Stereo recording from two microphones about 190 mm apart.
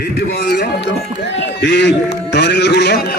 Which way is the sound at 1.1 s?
70° left (ahead or behind).